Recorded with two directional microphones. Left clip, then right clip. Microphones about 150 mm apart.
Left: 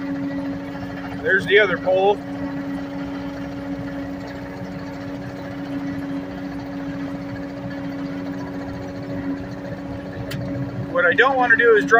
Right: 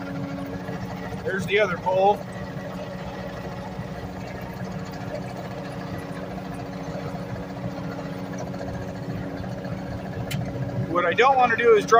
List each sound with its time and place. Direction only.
1.5 s speech: 5° right (ahead or behind)
10.9 s speech: 30° right (ahead or behind)